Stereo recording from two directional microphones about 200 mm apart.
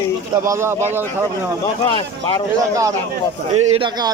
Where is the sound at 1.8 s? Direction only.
25° left (ahead or behind).